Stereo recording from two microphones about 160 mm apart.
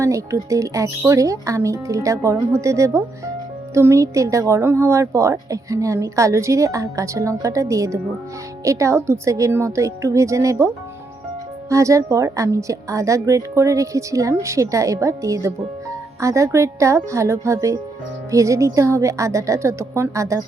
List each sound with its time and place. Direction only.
0.0 s a woman's voice: 20° right (ahead or behind)
11.7 s a woman's voice: 20° right (ahead or behind)